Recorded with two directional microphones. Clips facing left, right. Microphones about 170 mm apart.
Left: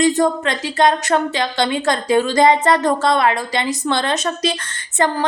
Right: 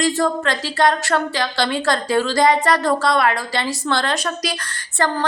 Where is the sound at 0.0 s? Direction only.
20° left (ahead or behind).